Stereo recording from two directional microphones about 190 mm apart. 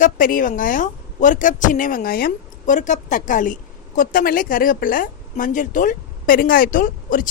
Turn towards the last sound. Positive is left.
turn(degrees=45)  # may be behind; listen again after turning